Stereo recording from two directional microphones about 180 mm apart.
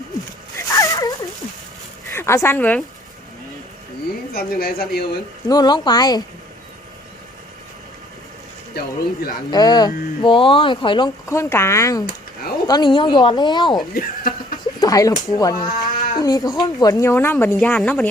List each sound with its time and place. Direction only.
0.7 s dog: 20° left (ahead or behind)
2.1 s speech: 15° left (ahead or behind)
4.3 s speech: 55° left (ahead or behind)
5.5 s speech: 25° left (ahead or behind)
8.7 s speech: 60° left (ahead or behind)
9.5 s speech: 20° left (ahead or behind)
12.0 s a sound: 55° left (ahead or behind)
12.6 s speech: 25° left (ahead or behind)
13.9 s a sound: 50° left (ahead or behind)
14.8 s speech: 20° left (ahead or behind); by 18.1 s 5° left (ahead or behind)